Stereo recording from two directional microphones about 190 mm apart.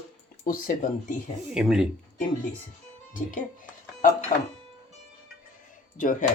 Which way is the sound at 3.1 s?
45° left (ahead or behind).